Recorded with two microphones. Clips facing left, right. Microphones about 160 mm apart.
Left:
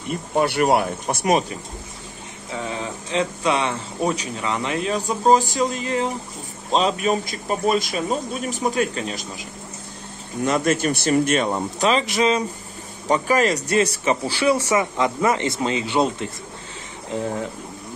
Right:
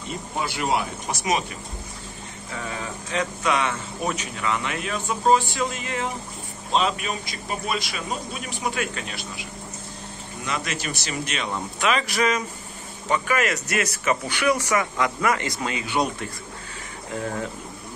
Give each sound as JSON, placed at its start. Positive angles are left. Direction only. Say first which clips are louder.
{"t": 0.1, "sound": "speech", "louder": "left 9 dB", "side_deg": 60}
{"t": 2.5, "sound": "speech", "louder": "left 4 dB", "side_deg": 25}
{"t": 10.4, "sound": "speech", "louder": "left 10 dB", "side_deg": 50}
{"t": 12.0, "sound": "speech", "louder": "left 4 dB", "side_deg": 25}